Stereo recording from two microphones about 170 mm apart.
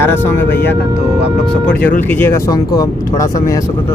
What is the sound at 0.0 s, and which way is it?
Speech, 15° left (ahead or behind).